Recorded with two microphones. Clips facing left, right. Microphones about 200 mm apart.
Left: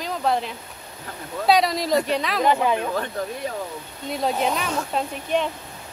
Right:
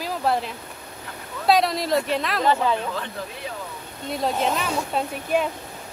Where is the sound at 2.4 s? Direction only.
15° left (ahead or behind).